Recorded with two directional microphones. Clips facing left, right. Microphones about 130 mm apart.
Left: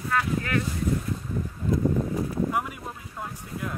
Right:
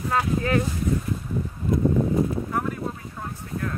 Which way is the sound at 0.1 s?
30° right (ahead or behind).